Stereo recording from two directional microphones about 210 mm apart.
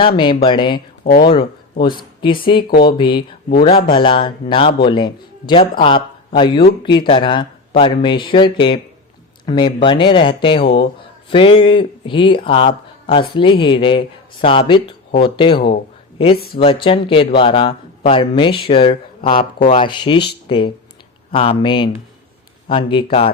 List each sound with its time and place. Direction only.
0.2 s speech: 25° left (ahead or behind)